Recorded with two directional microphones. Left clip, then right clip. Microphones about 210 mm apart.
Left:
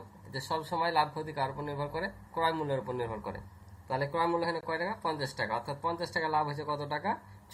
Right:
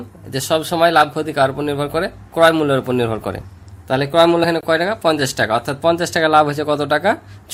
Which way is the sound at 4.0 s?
50° right (ahead or behind).